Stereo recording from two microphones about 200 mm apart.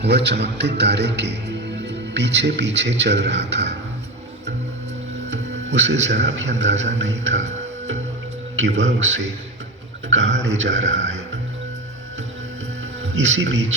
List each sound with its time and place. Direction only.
0.0 s a man's voice: 55° right (ahead or behind)
5.3 s a man's voice: 65° right (ahead or behind)
8.5 s a man's voice: 65° right (ahead or behind)
13.2 s a man's voice: 70° right (ahead or behind)